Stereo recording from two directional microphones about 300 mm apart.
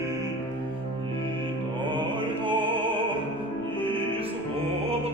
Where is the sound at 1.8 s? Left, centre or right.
Centre.